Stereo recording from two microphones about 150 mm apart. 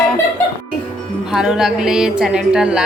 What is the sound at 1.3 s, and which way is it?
A woman's voice, 5° right (ahead or behind).